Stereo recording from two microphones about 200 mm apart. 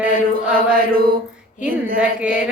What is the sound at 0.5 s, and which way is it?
Mantra, 45° right (ahead or behind).